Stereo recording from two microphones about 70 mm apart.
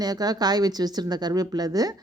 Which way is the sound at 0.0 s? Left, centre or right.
Right.